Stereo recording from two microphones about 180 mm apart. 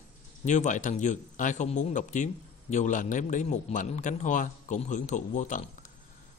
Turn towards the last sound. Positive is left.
turn(degrees=45)  # may be behind; listen again after turning